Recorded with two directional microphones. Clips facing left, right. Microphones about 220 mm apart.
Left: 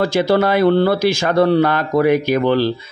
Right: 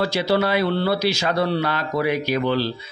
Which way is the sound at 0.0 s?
50° left (ahead or behind).